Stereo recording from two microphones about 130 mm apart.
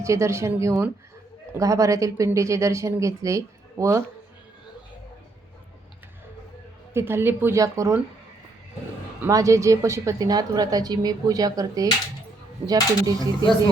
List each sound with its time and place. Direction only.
0.0 s a woman's voice: 20° right (ahead or behind)
6.9 s a woman's voice: 20° right (ahead or behind)
9.2 s a woman's voice: 25° right (ahead or behind)